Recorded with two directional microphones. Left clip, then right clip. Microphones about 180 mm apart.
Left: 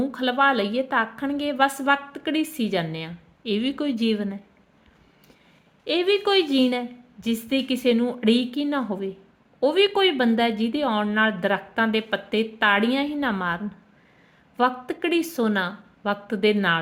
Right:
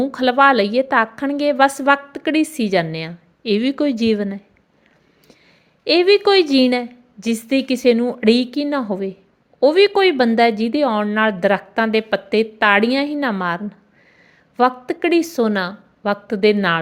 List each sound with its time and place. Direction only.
0.1 s a woman's voice: 35° right (ahead or behind)
5.8 s a woman's voice: 35° right (ahead or behind)